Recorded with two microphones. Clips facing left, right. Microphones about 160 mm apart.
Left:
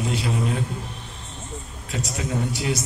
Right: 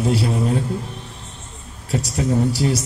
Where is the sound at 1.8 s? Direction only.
30° right (ahead or behind).